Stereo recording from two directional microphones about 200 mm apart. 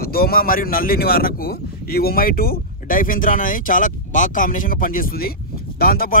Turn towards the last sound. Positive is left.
turn(degrees=50)  # may be behind; listen again after turning